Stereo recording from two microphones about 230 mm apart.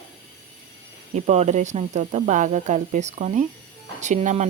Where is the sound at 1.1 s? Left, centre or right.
Right.